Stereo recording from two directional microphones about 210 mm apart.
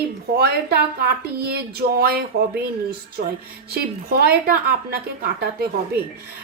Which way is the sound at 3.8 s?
45° right (ahead or behind).